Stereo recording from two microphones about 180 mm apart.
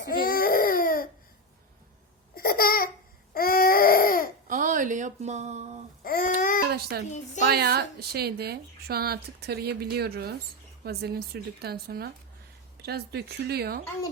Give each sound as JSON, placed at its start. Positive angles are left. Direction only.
{"t": 0.1, "sound": "baby cry", "side_deg": 55}
{"t": 2.3, "sound": "babbling", "side_deg": 55}
{"t": 3.3, "sound": "baby cry", "side_deg": 55}
{"t": 4.4, "sound": "a sound", "side_deg": -45}
{"t": 6.0, "sound": "babbling", "side_deg": 55}
{"t": 6.7, "sound": "a child's voice", "side_deg": -60}
{"t": 7.0, "sound": "a woman's voice", "side_deg": 40}
{"t": 7.4, "sound": "a woman's voice", "side_deg": -65}